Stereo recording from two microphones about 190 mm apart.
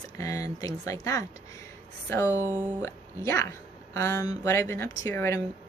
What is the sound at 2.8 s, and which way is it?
Speech, 15° left (ahead or behind).